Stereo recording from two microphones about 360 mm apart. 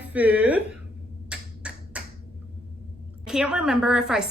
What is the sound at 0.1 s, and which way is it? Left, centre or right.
Speech, centre.